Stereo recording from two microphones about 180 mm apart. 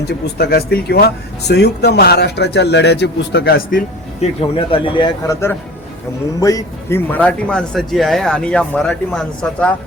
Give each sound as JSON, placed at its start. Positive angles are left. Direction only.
{"t": 0.0, "sound": "speech", "side_deg": 65}
{"t": 4.2, "sound": "a man's voice", "side_deg": 30}